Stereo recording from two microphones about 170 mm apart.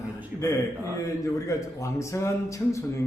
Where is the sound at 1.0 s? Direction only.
20° left (ahead or behind).